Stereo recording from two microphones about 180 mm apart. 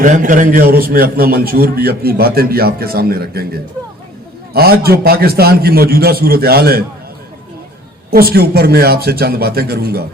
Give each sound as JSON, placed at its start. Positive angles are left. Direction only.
{"t": 0.0, "sound": "a man's voice", "side_deg": -45}
{"t": 8.1, "sound": "a man's voice", "side_deg": -55}